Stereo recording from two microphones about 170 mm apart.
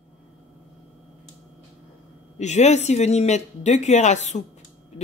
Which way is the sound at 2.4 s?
40° left (ahead or behind).